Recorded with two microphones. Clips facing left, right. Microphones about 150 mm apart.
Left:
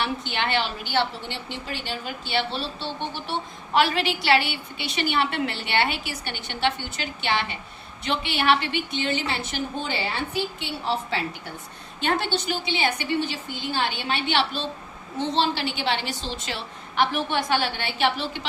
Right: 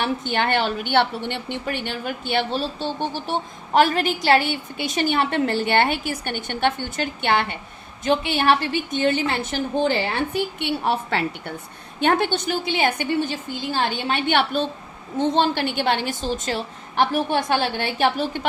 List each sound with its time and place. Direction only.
0.0 s a woman's voice: 45° right (ahead or behind)